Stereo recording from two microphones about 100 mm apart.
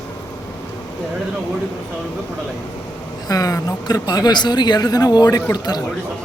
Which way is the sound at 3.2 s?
40° left (ahead or behind).